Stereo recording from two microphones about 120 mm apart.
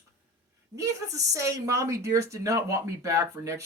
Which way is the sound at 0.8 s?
25° right (ahead or behind).